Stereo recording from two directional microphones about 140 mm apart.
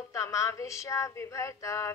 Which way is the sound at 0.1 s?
20° left (ahead or behind).